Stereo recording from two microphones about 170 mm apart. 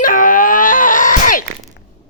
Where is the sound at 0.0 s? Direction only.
50° left (ahead or behind).